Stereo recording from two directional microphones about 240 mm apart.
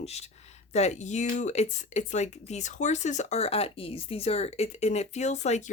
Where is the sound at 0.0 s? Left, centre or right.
Left.